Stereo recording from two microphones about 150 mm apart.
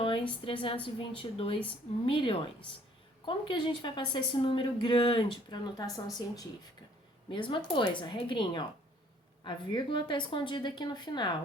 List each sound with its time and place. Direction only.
0.0 s a woman's voice: 35° left (ahead or behind)